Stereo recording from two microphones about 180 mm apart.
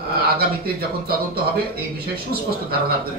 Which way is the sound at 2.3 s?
60° right (ahead or behind).